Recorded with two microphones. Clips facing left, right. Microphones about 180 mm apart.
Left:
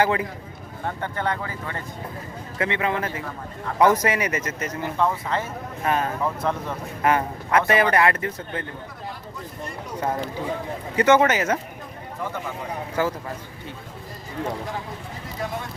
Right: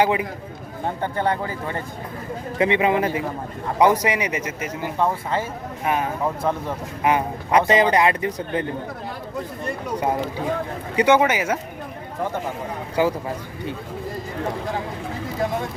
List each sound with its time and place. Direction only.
0.0 s speech: 15° right (ahead or behind)
0.9 s speech: 35° right (ahead or behind)
2.6 s speech: 15° right (ahead or behind)
10.0 s speech: 15° right (ahead or behind)
13.0 s speech: 15° right (ahead or behind)